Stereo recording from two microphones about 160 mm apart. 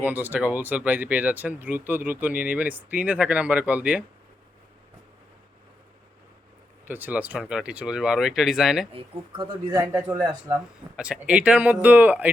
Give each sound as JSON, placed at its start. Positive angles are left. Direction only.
{"t": 0.0, "sound": "speech", "side_deg": -10}
{"t": 6.8, "sound": "speech", "side_deg": -10}
{"t": 8.9, "sound": "speech", "side_deg": -35}
{"t": 9.8, "sound": "speech", "side_deg": -10}